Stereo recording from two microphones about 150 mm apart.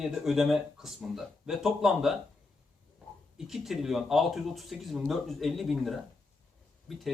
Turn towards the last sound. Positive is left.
turn(degrees=0)  # may be behind; listen again after turning